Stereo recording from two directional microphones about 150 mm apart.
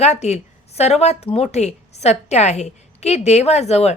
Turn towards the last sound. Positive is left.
turn(degrees=45)  # may be behind; listen again after turning